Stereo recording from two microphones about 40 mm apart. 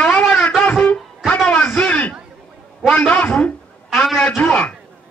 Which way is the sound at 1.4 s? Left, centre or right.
Left.